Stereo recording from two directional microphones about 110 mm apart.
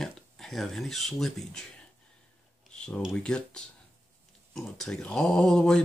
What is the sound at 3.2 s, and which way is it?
Speech, 10° left (ahead or behind).